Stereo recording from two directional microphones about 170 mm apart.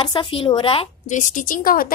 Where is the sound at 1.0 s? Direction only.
45° left (ahead or behind).